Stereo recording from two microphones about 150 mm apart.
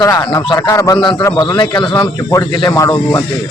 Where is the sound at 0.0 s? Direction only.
30° left (ahead or behind).